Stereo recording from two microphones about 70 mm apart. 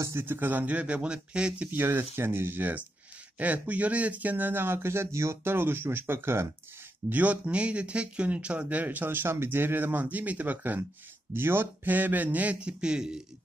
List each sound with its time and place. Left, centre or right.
0.0 s speech: right; by 1.7 s centre
1.7 s speech: right
7.1 s speech: right